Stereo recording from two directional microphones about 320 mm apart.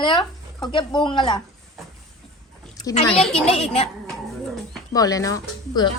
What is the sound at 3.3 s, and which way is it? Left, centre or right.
Speech, centre.